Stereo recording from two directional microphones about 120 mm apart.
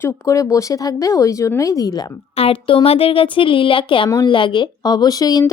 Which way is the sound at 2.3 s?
50° left (ahead or behind).